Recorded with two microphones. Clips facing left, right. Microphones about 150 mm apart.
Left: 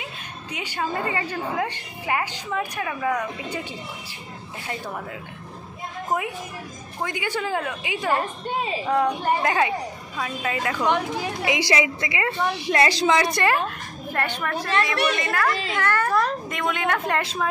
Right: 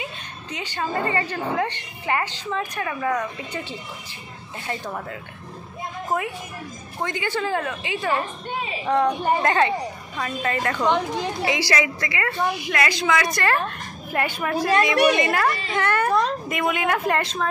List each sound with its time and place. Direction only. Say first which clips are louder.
0.5 s a woman's voice: even; 10° left (ahead or behind)
4.6 s speech: right 2 dB; 5° left (ahead or behind)
7.0 s a woman's voice: right 2 dB; 10° left (ahead or behind)
12.4 s a woman's voice: left 5 dB; 30° left (ahead or behind)
14.1 s a woman's voice: right 3 dB; 10° right (ahead or behind)
16.4 s speech: right 2 dB; 5° right (ahead or behind)